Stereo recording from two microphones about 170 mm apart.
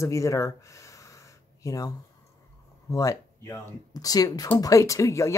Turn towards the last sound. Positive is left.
turn(degrees=20)  # may be behind; listen again after turning